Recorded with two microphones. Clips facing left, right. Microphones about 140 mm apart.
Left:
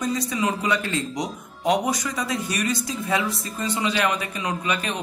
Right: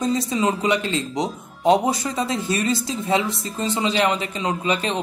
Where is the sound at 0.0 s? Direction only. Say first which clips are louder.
Right 4 dB; 25° right (ahead or behind).